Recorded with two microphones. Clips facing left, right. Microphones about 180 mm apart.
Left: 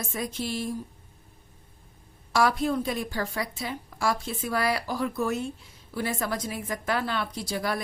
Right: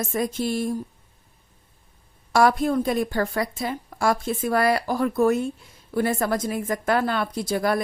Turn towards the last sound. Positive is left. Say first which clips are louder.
# right 7 dB
turn(degrees=-50)  # may be behind; listen again after turning